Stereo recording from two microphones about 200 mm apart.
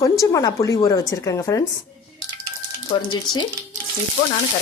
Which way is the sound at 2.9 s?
25° left (ahead or behind).